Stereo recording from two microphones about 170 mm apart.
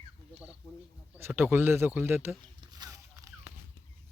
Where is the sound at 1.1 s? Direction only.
10° right (ahead or behind).